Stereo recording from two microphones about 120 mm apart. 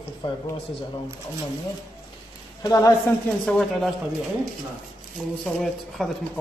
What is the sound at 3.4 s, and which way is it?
Speech, 5° left (ahead or behind).